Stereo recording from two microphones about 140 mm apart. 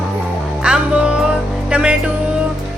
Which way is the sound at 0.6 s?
5° right (ahead or behind).